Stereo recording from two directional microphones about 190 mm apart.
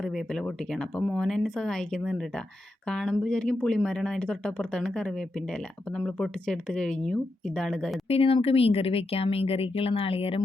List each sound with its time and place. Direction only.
0.0 s speech: centre (ahead or behind)
8.0 s speech: 30° left (ahead or behind)